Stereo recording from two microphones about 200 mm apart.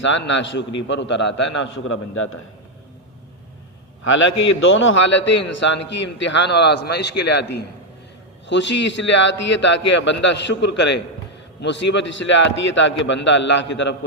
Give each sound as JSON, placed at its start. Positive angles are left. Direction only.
{"t": 0.0, "sound": "a man's voice", "side_deg": 65}
{"t": 1.6, "sound": "a man's voice", "side_deg": 75}
{"t": 4.0, "sound": "a man's voice", "side_deg": 70}
{"t": 8.4, "sound": "a man's voice", "side_deg": 65}